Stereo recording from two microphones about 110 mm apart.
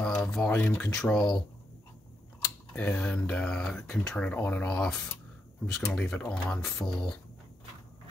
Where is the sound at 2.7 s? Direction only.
10° left (ahead or behind).